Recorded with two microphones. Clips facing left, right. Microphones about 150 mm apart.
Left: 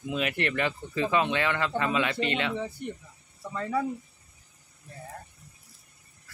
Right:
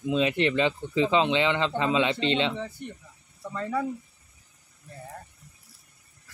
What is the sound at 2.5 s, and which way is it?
Speech, 10° left (ahead or behind).